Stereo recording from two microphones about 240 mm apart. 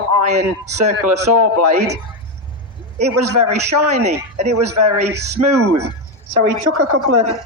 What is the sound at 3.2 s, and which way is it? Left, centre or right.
A man's voice, right.